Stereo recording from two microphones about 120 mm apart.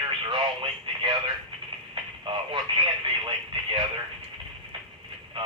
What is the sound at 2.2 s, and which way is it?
Radio, 40° right (ahead or behind).